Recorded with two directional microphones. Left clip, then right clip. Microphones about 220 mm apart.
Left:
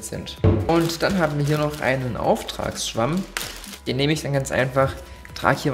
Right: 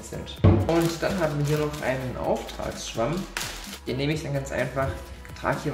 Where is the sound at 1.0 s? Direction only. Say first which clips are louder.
Left 4 dB; 45° left (ahead or behind).